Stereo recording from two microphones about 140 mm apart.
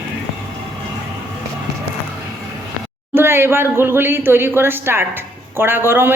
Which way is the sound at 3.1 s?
15° right (ahead or behind).